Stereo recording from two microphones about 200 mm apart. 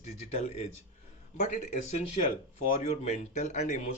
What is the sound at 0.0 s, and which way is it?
Speech, 35° left (ahead or behind).